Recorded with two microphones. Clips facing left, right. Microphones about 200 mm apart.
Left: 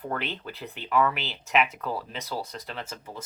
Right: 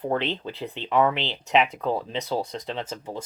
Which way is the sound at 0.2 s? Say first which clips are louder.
Right 6 dB; 30° right (ahead or behind).